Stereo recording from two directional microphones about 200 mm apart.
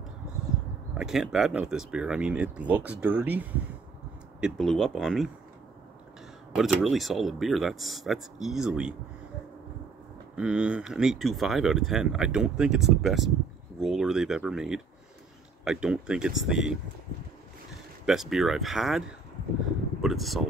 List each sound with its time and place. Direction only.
0.9 s speech: centre (ahead or behind)
6.5 s speech: centre (ahead or behind)
10.3 s speech: 5° right (ahead or behind)
18.0 s speech: centre (ahead or behind)